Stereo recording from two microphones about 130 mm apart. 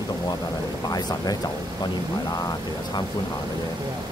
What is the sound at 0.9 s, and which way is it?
Speech, 30° left (ahead or behind).